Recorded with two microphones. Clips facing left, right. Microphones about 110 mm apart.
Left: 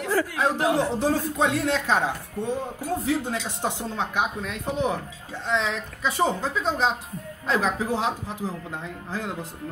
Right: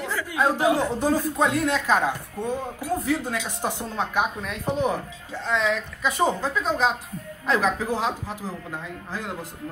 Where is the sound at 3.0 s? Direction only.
25° left (ahead or behind).